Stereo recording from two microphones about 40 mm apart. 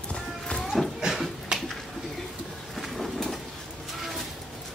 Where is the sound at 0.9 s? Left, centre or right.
Centre.